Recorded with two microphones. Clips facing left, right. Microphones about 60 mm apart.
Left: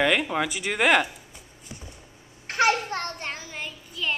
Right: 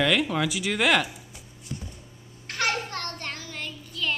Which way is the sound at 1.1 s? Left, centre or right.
Centre.